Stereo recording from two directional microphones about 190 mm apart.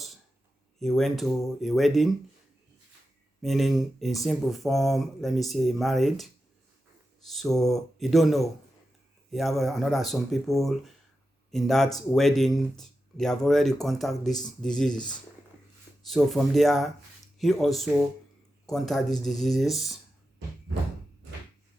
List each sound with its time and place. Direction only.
0.8 s speech: centre (ahead or behind)
3.4 s speech: centre (ahead or behind)